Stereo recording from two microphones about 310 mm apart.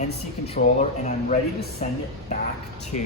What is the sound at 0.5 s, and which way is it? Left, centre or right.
Speech, left.